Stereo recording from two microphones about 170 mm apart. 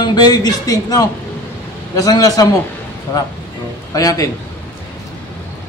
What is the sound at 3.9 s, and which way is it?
Speech, 20° left (ahead or behind).